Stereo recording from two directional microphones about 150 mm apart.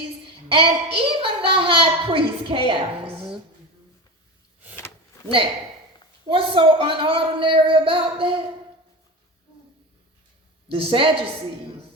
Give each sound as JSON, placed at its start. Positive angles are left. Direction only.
{"t": 0.3, "sound": "a child's voice", "side_deg": -35}
{"t": 6.2, "sound": "a child's voice", "side_deg": -35}
{"t": 10.7, "sound": "a child's voice", "side_deg": -35}